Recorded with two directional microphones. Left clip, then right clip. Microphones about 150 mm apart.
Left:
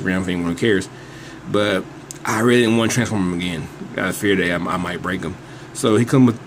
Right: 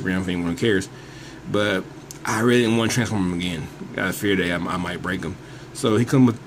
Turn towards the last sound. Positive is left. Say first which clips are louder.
# left 3 dB
turn(degrees=0)  # may be behind; listen again after turning